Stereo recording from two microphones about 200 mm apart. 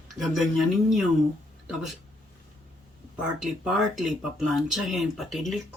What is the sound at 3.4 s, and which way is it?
Speech, centre (ahead or behind).